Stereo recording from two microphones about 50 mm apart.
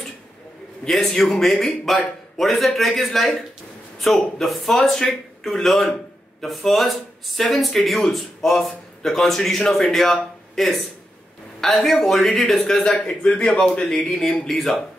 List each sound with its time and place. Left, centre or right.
0.8 s speech: centre